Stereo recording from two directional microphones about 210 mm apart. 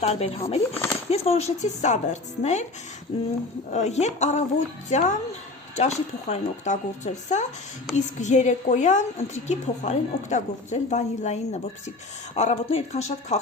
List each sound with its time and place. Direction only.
0.0 s a woman's voice: 30° left (ahead or behind)